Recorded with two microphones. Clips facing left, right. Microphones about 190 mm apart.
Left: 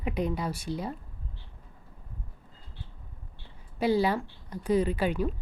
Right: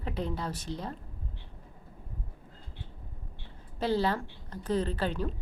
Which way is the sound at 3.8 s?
10° left (ahead or behind).